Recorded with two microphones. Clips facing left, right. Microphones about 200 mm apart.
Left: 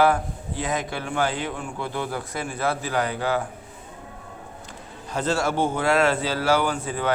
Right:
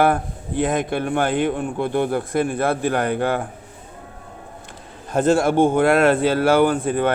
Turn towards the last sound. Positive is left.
turn(degrees=-55)  # may be behind; listen again after turning